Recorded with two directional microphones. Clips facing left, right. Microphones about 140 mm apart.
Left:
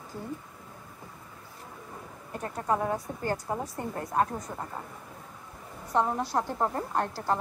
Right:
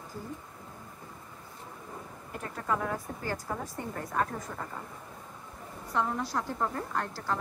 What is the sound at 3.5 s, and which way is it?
Speech, 25° left (ahead or behind).